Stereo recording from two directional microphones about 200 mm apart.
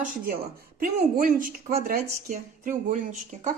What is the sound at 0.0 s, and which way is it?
Speech, 45° right (ahead or behind).